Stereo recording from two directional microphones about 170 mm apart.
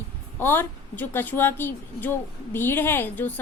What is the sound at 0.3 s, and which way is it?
A woman's voice, 10° left (ahead or behind).